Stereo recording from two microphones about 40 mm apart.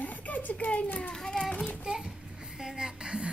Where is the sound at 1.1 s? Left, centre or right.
Centre.